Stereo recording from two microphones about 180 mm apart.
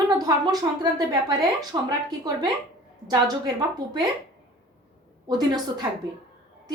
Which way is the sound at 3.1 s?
20° right (ahead or behind).